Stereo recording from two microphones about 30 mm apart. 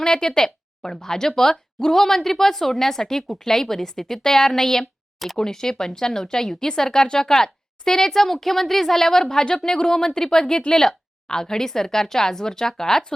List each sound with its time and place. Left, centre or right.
0.0 s a woman's voice: left